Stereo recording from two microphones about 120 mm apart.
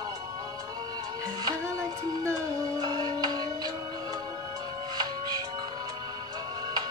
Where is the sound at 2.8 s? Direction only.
35° right (ahead or behind).